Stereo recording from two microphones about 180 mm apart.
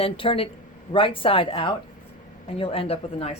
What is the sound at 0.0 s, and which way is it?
A woman's voice, 30° left (ahead or behind).